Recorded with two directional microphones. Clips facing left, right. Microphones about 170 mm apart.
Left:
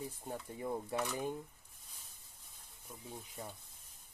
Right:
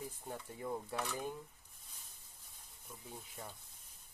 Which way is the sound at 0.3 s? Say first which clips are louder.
Left 2 dB; 25° left (ahead or behind).